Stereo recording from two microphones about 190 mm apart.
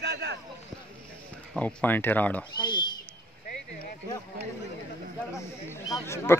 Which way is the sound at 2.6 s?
25° left (ahead or behind).